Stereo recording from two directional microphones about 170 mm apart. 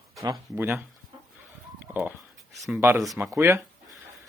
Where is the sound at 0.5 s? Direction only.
10° right (ahead or behind).